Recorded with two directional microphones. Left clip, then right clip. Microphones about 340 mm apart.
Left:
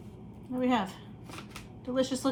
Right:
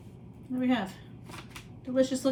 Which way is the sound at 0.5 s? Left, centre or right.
Centre.